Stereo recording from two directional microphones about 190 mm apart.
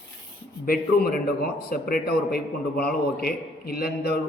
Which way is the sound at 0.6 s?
50° left (ahead or behind).